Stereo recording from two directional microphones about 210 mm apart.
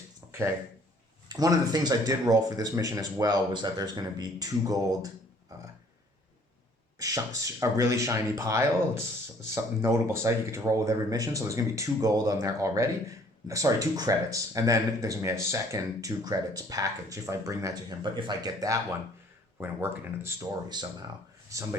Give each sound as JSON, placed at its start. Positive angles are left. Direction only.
{"t": 0.3, "sound": "a sound", "side_deg": -10}
{"t": 1.3, "sound": "speech", "side_deg": -20}
{"t": 7.0, "sound": "speech", "side_deg": -15}